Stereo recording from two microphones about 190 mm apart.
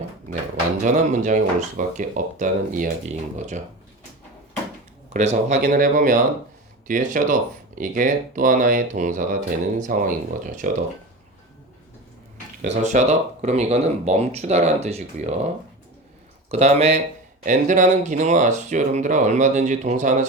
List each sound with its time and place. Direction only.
0.9 s speech: 40° right (ahead or behind)
5.1 s speech: 35° right (ahead or behind)
5.5 s speech: 50° right (ahead or behind)
12.7 s speech: 40° right (ahead or behind)
16.5 s speech: 35° right (ahead or behind)